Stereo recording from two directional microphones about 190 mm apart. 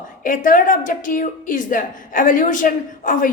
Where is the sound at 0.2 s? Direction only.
45° left (ahead or behind).